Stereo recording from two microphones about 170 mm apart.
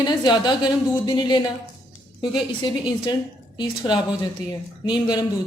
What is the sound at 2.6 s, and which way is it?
A woman's voice, 25° left (ahead or behind).